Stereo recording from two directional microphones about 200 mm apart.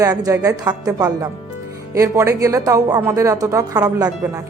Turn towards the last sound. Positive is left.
turn(degrees=-20)  # may be behind; listen again after turning